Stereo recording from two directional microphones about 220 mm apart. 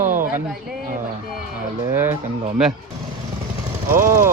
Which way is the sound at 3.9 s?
40° right (ahead or behind).